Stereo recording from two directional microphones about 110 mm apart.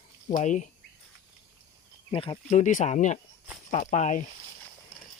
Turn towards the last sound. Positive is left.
turn(degrees=90)